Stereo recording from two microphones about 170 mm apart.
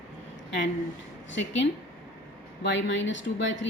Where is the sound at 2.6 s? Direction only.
90° left.